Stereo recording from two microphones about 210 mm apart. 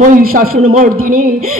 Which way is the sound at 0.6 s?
30° right (ahead or behind).